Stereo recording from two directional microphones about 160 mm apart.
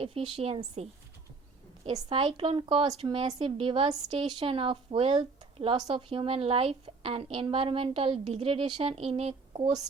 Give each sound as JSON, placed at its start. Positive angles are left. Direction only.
{"t": 0.0, "sound": "a woman's voice", "side_deg": -35}
{"t": 1.9, "sound": "a woman's voice", "side_deg": -30}